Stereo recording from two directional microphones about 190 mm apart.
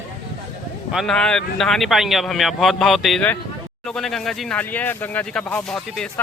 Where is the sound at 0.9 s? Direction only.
Centre (ahead or behind).